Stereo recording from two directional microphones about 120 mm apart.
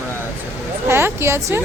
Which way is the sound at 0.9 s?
20° right (ahead or behind).